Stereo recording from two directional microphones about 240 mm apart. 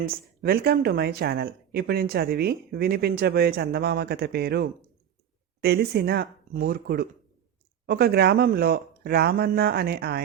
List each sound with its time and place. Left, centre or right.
0.1 s speech: right